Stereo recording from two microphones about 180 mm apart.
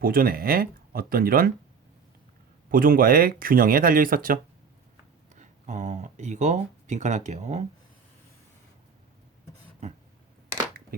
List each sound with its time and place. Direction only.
0.0 s speech: 55° right (ahead or behind)
2.6 s speech: 50° right (ahead or behind)